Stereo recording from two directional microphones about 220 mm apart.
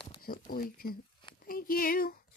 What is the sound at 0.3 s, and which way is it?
Speech, 40° left (ahead or behind).